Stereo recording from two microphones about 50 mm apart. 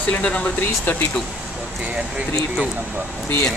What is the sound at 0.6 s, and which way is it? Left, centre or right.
Speech, left.